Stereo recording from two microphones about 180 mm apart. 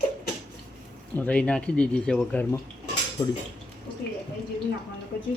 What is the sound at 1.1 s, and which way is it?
Speech, 10° left (ahead or behind).